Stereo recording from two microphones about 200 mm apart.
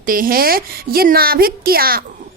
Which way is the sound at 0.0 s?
45° right (ahead or behind).